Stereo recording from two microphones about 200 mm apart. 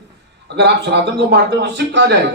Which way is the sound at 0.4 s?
55° right (ahead or behind).